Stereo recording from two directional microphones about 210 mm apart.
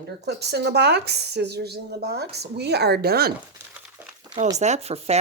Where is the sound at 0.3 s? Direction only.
50° right (ahead or behind).